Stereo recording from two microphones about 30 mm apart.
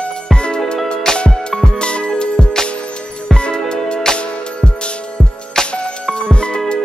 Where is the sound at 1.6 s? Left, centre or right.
Left.